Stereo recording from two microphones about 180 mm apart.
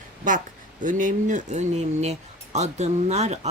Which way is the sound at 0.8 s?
45° right (ahead or behind).